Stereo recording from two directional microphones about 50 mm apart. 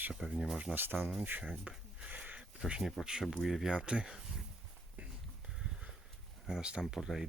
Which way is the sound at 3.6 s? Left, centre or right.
Right.